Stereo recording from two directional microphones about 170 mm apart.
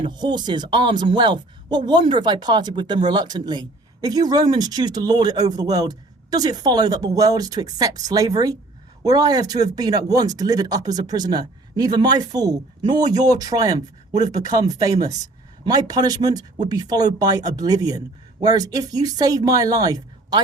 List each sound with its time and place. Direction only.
0.0 s speech: 25° right (ahead or behind)